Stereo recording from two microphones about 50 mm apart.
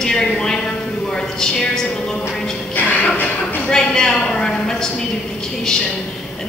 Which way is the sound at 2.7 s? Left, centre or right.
Left.